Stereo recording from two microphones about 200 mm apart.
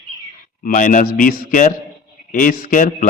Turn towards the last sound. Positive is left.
turn(degrees=40)  # may be behind; listen again after turning